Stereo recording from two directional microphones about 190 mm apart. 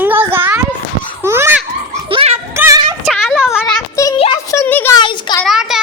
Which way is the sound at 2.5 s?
15° right (ahead or behind).